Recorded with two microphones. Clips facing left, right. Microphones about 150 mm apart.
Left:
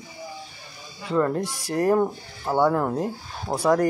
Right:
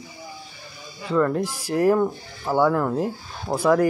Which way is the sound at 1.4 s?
5° right (ahead or behind).